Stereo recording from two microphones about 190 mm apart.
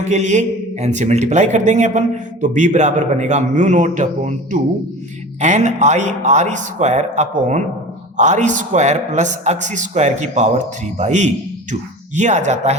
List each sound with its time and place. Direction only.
0.1 s a man's voice: 40° right (ahead or behind)